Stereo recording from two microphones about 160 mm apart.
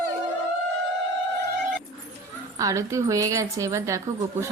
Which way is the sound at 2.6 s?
20° right (ahead or behind).